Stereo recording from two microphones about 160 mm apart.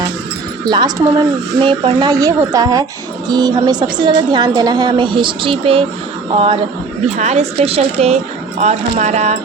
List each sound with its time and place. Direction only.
0.6 s a woman's voice: 25° right (ahead or behind); by 9.4 s 45° right (ahead or behind)